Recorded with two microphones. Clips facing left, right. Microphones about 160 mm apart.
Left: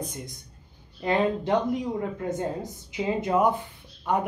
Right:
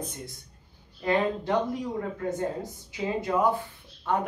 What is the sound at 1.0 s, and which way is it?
Speech, 20° left (ahead or behind).